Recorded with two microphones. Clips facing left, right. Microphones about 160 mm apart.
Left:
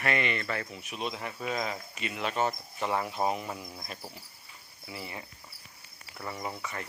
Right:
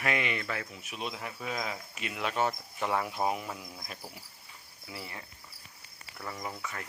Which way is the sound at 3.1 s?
5° right (ahead or behind).